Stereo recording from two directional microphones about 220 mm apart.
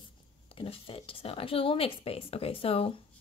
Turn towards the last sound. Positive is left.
turn(degrees=25)  # may be behind; listen again after turning